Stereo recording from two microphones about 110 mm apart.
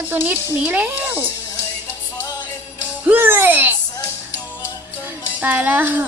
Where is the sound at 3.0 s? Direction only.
15° right (ahead or behind).